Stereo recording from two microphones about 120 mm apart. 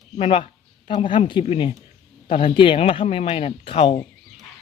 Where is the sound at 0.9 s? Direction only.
50° left (ahead or behind).